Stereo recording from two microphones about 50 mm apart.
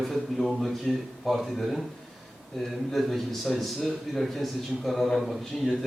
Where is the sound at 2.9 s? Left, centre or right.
Centre.